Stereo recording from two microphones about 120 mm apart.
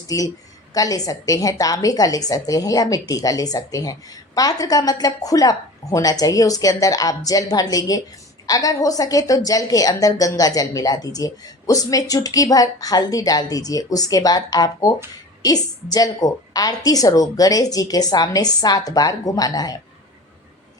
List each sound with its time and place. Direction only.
0.7 s a woman's voice: 30° left (ahead or behind)